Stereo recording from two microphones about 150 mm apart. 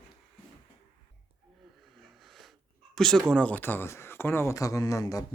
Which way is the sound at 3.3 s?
10° left (ahead or behind).